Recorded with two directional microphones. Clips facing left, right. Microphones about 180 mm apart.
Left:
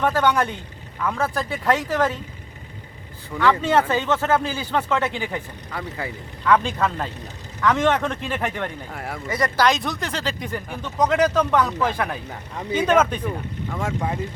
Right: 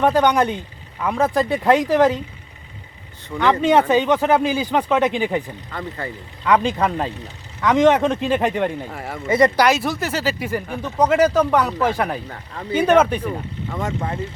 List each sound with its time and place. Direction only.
0.0 s speech: 15° right (ahead or behind)
3.3 s speech: 15° right (ahead or behind)
6.4 s speech: 15° right (ahead or behind)
8.9 s speech: centre (ahead or behind)
9.3 s speech: 20° right (ahead or behind)
9.6 s speech: 5° right (ahead or behind)
13.2 s speech: centre (ahead or behind)